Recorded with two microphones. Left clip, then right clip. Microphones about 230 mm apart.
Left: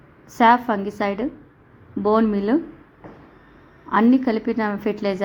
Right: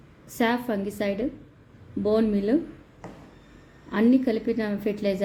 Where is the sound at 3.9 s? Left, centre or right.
Centre.